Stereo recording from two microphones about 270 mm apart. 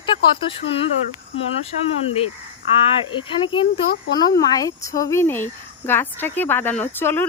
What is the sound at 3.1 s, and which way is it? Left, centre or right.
A woman's voice, centre.